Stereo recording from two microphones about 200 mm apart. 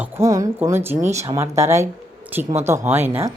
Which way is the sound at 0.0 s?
15° right (ahead or behind).